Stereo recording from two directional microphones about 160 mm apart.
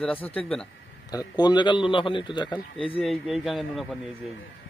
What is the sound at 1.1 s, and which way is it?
Speech, 25° left (ahead or behind).